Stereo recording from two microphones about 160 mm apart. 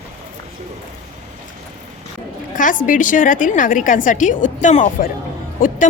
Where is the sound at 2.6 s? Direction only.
55° left (ahead or behind).